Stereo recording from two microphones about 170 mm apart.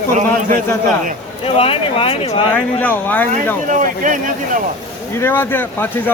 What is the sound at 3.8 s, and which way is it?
Speech, 50° right (ahead or behind).